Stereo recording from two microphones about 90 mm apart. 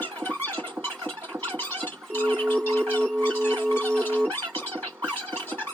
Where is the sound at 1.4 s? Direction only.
20° left (ahead or behind).